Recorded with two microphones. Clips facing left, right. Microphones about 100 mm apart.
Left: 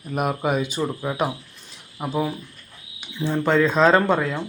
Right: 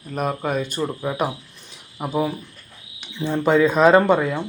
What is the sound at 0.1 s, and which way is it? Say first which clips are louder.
Speech: left 1 dB; 10° left (ahead or behind).